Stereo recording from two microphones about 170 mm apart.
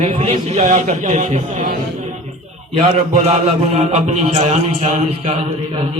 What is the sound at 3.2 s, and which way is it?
Mantra, 40° right (ahead or behind).